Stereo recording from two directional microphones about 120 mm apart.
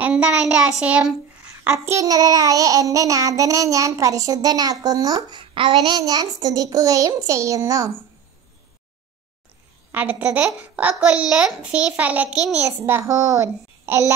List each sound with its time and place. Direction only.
0.0 s a child's voice: 10° right (ahead or behind)
1.9 s child singing: 30° right (ahead or behind)
9.9 s a child's voice: 15° right (ahead or behind)
12.5 s child singing: 20° right (ahead or behind)